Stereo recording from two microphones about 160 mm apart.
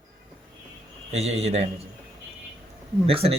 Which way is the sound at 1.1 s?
40° right (ahead or behind).